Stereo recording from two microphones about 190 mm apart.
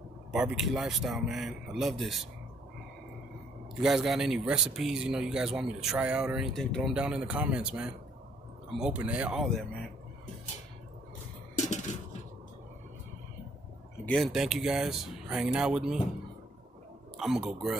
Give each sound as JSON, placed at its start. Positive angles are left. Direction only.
{"t": 0.3, "sound": "a man's voice", "side_deg": -5}
{"t": 3.8, "sound": "a man's voice", "side_deg": 0}
{"t": 11.5, "sound": "a sound", "side_deg": 40}
{"t": 14.0, "sound": "a man's voice", "side_deg": 0}
{"t": 17.2, "sound": "a man's voice", "side_deg": 0}